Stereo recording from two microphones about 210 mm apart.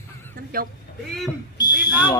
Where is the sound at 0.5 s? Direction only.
45° right (ahead or behind).